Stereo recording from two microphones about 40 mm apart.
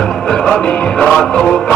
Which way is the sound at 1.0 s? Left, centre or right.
Centre.